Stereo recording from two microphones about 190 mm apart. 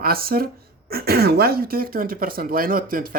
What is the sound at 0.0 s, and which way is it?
Speech, 50° right (ahead or behind).